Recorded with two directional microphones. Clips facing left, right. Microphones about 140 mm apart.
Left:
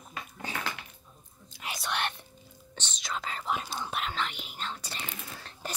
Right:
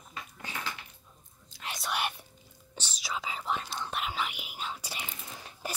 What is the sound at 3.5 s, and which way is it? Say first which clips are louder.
Whispering: left 2 dB; 10° left (ahead or behind).